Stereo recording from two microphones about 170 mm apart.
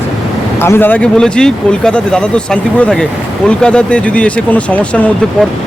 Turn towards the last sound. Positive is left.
turn(degrees=10)  # may be behind; listen again after turning